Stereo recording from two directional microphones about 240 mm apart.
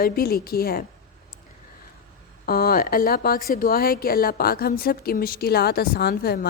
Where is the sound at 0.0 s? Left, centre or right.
Left.